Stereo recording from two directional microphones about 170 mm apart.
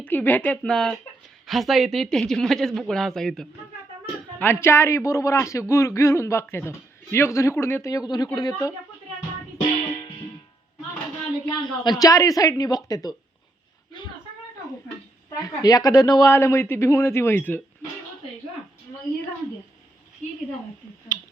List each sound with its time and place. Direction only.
0.0 s a woman's voice: 10° left (ahead or behind)
4.4 s a woman's voice: 15° left (ahead or behind)
11.4 s a woman's voice: 25° left (ahead or behind)
15.4 s a woman's voice: 20° left (ahead or behind)
21.1 s tick-tock: 25° right (ahead or behind)